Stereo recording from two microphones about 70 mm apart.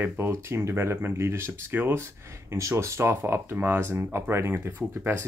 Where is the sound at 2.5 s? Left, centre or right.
Right.